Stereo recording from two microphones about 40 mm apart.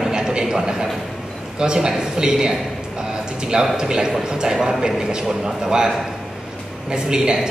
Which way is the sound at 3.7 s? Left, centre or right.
Centre.